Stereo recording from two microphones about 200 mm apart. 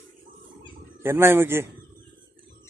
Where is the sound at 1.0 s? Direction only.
10° right (ahead or behind).